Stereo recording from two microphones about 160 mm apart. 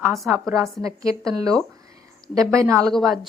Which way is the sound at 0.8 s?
20° right (ahead or behind).